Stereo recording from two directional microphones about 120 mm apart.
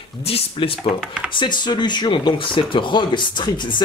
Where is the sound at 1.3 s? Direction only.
40° left (ahead or behind).